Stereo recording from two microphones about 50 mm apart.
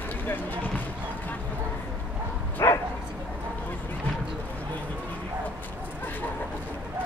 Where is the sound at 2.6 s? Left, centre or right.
Left.